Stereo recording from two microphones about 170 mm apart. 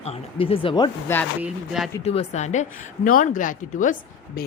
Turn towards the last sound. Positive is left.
turn(degrees=55)  # may be behind; listen again after turning